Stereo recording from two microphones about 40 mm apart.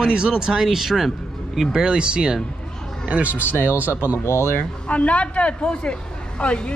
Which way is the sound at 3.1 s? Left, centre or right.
Right.